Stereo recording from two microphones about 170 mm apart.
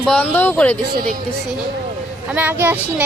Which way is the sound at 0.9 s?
55° right (ahead or behind).